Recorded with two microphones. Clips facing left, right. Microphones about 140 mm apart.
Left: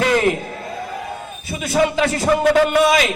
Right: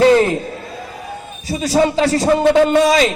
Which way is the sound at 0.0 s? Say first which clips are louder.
Right 7 dB; 30° right (ahead or behind).